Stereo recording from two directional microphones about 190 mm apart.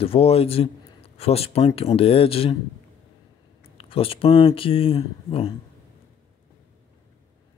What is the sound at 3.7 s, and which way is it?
Speech, 30° left (ahead or behind).